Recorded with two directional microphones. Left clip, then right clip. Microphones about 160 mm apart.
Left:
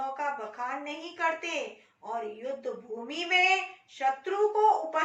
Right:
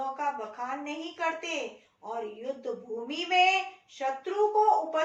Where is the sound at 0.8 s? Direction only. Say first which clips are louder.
Left 2 dB; 10° right (ahead or behind).